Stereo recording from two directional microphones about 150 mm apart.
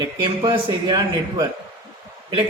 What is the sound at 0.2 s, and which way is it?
A man's voice, 30° right (ahead or behind).